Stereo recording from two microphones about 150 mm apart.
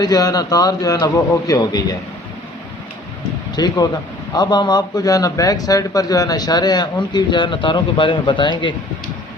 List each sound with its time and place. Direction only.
0.0 s a man's voice: 25° left (ahead or behind)
3.5 s a man's voice: 25° left (ahead or behind)